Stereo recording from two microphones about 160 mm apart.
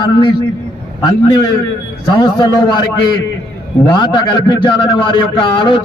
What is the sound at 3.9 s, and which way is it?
A man's voice, 30° left (ahead or behind).